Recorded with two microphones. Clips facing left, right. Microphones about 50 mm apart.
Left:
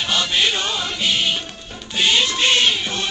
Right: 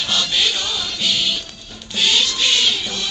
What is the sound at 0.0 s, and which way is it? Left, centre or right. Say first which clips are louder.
Music: left 1 dB; left.